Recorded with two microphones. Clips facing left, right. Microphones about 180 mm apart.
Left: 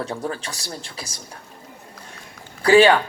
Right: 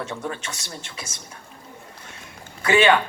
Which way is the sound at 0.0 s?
35° left (ahead or behind).